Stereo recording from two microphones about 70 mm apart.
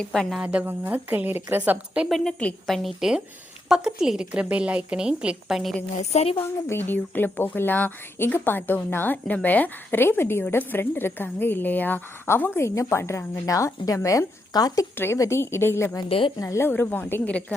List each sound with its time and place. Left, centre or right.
0.0 s a woman's voice: centre
0.4 s a woman's voice: right
2.0 s a woman's voice: centre
3.7 s a woman's voice: centre
6.4 s a woman's voice: left
12.6 s a woman's voice: left
13.4 s a woman's voice: left
14.5 s speech: left
14.9 s a woman's voice: left
16.4 s a woman's voice: left
16.6 s a woman's voice: left